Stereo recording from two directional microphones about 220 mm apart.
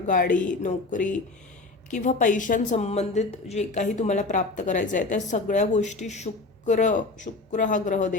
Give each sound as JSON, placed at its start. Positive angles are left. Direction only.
{"t": 0.1, "sound": "a woman's voice", "side_deg": 35}